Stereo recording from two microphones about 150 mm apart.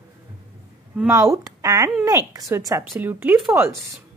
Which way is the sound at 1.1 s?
25° right (ahead or behind).